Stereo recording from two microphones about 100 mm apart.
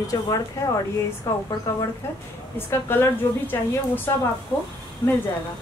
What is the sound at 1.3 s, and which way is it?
A woman's voice, 25° left (ahead or behind).